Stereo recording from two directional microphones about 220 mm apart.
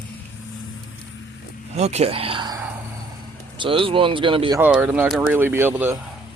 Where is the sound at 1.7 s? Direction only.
30° right (ahead or behind).